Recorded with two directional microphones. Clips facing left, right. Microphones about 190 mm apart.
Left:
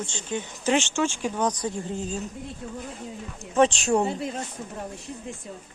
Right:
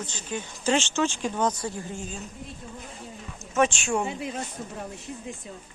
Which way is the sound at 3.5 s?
35° left (ahead or behind).